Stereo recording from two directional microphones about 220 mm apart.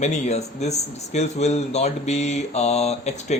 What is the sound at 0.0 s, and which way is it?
Speech, 30° left (ahead or behind).